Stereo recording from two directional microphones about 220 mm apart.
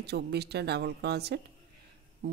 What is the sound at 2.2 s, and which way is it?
Music, 45° right (ahead or behind).